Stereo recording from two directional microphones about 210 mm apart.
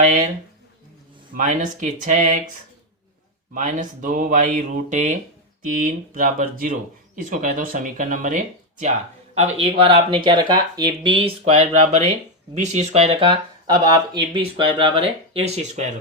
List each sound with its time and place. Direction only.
1.4 s speech: 40° right (ahead or behind)
3.5 s speech: 40° right (ahead or behind)